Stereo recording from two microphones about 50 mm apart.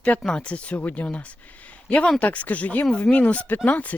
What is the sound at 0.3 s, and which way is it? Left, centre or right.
Speech, left.